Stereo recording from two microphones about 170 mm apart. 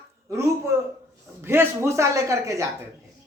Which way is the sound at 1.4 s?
15° right (ahead or behind).